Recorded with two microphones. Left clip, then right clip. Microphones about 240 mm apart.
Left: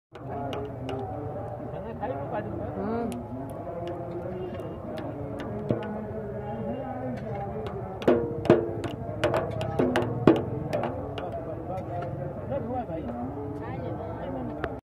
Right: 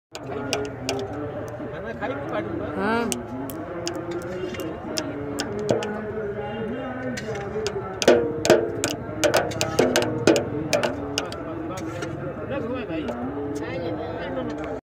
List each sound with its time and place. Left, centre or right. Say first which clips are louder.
2.8 s vehicle: right 8 dB; right
8.0 s music: right 6 dB; centre